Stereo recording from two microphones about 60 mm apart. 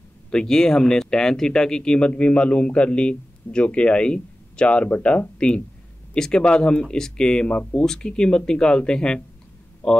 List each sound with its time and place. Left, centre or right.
0.3 s speech: centre